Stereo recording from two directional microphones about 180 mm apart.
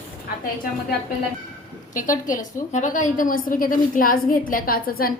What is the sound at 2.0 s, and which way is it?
A woman's voice, 45° left (ahead or behind).